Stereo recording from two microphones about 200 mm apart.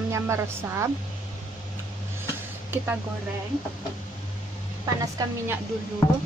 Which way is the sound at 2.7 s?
10° right (ahead or behind).